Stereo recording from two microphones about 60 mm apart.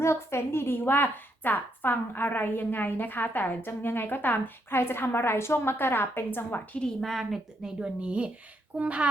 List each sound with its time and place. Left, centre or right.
0.0 s a woman's voice: left
6.7 s a woman's voice: centre